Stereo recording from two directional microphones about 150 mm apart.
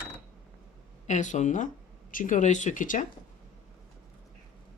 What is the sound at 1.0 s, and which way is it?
Speech, 55° left (ahead or behind).